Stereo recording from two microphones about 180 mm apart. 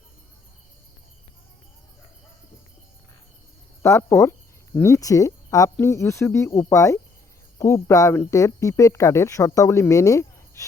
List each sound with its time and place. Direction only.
3.8 s speech: 15° left (ahead or behind)